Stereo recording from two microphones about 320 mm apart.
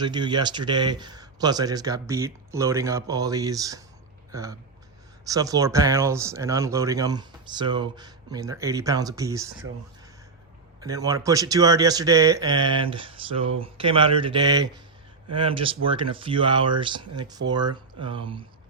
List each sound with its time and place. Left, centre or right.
0.0 s speech: centre
10.8 s speech: centre